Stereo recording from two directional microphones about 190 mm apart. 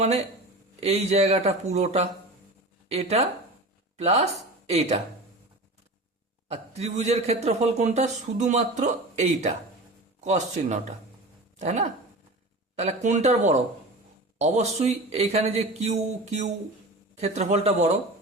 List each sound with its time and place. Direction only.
0.8 s a man's voice: 35° right (ahead or behind)
6.5 s a man's voice: 35° right (ahead or behind)